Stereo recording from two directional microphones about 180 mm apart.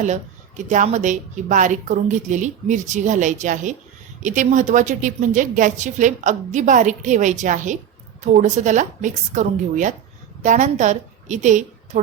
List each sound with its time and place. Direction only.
0.0 s a woman's voice: 45° right (ahead or behind)